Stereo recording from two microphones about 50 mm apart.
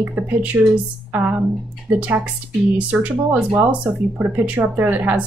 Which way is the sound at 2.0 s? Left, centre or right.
Right.